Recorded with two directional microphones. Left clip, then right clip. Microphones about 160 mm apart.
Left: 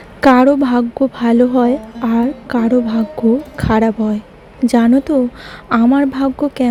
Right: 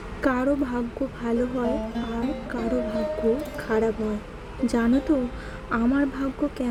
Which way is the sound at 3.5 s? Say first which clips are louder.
Left 9 dB; 50° left (ahead or behind).